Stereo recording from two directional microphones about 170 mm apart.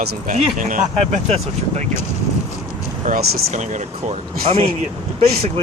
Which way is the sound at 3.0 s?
50° right (ahead or behind).